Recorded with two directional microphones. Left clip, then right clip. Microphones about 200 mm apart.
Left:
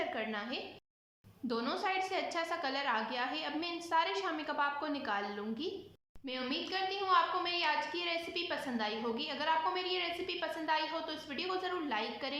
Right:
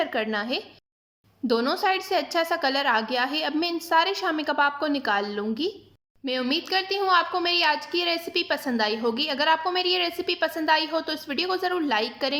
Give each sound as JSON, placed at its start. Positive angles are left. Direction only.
{"t": 0.0, "sound": "a woman's voice", "side_deg": -45}